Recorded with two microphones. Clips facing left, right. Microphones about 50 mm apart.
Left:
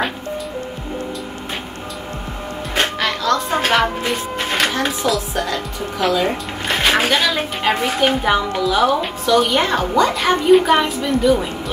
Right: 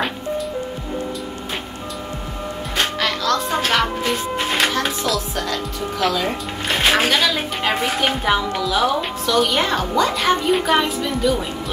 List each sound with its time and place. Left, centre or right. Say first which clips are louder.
3.0 s music: left 2 dB; centre
4.4 s music: left 1 dB; centre
5.0 s a woman's voice: left 3 dB; centre